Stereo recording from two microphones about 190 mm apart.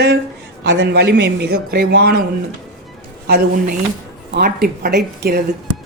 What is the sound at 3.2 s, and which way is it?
Speech, 55° right (ahead or behind).